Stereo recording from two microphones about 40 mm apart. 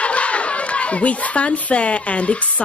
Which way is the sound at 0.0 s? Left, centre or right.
Left.